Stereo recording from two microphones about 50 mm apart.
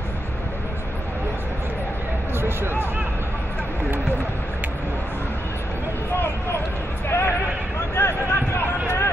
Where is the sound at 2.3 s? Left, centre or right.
Right.